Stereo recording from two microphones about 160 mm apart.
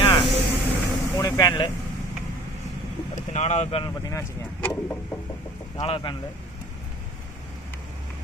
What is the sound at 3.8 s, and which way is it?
Speech, 20° left (ahead or behind).